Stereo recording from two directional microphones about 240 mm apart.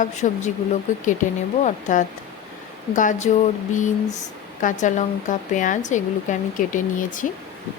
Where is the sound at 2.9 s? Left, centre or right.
Left.